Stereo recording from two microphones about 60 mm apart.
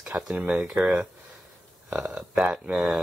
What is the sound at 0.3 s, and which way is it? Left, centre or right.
Speech, centre.